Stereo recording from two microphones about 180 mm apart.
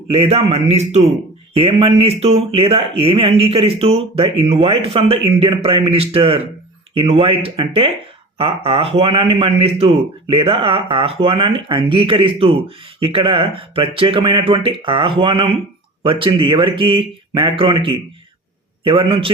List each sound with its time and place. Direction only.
0.1 s a man's voice: 35° right (ahead or behind)